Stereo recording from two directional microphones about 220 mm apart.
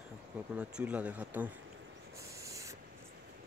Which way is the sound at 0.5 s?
5° right (ahead or behind).